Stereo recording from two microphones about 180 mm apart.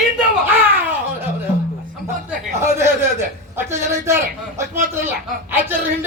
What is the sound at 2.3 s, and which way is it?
Speech, 15° right (ahead or behind).